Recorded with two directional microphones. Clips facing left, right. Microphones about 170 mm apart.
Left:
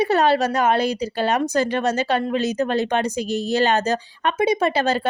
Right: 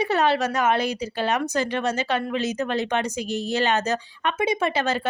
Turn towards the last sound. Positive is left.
turn(degrees=35)  # may be behind; listen again after turning